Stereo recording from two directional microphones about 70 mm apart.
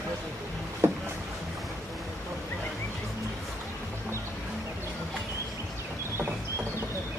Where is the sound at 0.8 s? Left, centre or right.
Right.